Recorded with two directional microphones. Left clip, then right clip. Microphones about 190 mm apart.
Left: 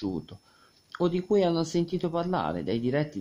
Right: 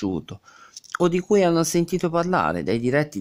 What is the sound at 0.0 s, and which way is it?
Speech, 20° right (ahead or behind).